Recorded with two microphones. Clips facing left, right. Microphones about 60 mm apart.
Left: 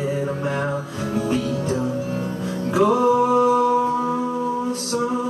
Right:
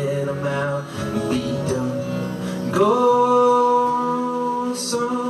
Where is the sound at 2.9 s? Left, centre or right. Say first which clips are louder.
Right 3 dB; left.